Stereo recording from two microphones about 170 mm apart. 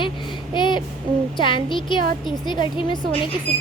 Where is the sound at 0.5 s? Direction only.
25° left (ahead or behind).